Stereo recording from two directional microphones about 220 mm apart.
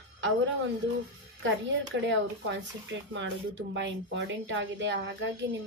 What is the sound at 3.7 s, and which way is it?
Speech, 55° right (ahead or behind).